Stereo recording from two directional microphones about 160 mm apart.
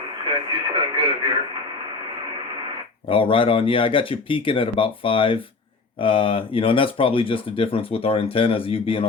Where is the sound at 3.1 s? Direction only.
35° left (ahead or behind).